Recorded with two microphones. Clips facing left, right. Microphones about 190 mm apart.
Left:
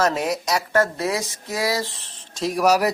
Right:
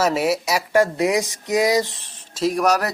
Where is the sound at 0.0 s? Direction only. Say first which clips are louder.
Right 2 dB; 10° right (ahead or behind).